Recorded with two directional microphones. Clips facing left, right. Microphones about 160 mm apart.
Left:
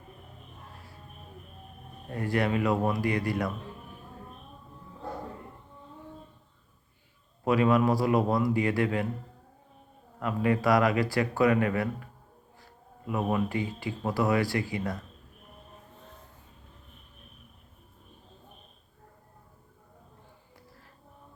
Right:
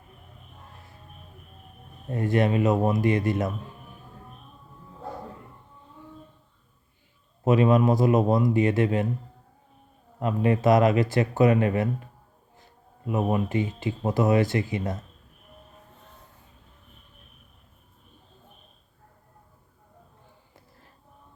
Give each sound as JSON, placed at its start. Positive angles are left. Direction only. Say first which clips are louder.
{"t": 2.0, "sound": "speech", "louder": "right 5 dB", "side_deg": -20}
{"t": 7.4, "sound": "speech", "louder": "right 3 dB", "side_deg": -20}
{"t": 10.2, "sound": "speech", "louder": "right 3 dB", "side_deg": -25}
{"t": 13.1, "sound": "speech", "louder": "right 3 dB", "side_deg": -20}